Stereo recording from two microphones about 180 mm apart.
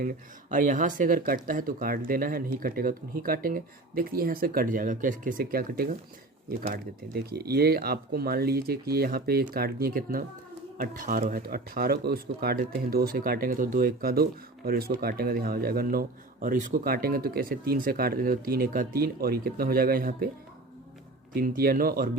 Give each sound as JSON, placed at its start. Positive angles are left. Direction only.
{"t": 0.5, "sound": "a man's voice", "side_deg": -45}
{"t": 21.3, "sound": "a man's voice", "side_deg": -55}